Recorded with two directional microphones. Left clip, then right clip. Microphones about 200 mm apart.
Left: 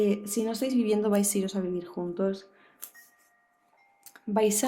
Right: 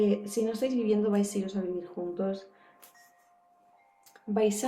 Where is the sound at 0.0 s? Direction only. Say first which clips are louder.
Even; 50° left (ahead or behind).